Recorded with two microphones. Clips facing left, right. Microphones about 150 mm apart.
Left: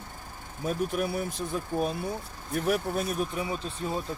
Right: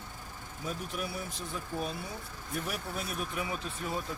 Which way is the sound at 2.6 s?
55° left (ahead or behind).